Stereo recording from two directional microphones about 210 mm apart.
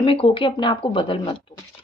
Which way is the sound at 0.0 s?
25° left (ahead or behind).